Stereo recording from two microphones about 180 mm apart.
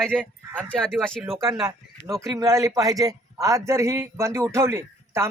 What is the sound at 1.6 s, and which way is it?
Speech, 15° right (ahead or behind).